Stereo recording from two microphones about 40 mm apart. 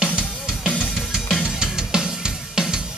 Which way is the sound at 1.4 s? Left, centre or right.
Centre.